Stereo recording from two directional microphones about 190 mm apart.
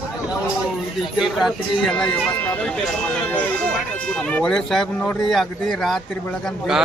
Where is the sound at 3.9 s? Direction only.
5° left (ahead or behind).